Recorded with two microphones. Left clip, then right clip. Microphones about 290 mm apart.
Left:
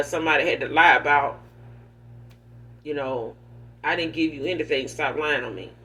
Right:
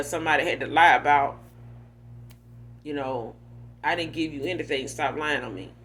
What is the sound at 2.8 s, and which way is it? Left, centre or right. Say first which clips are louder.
Speech: left 3 dB; right.